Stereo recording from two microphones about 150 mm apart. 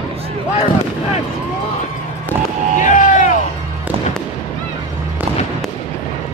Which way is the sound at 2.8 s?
60° left (ahead or behind).